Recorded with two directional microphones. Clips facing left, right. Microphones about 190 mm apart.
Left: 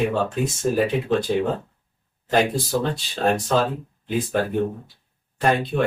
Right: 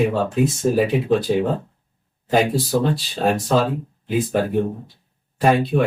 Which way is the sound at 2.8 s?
5° right (ahead or behind).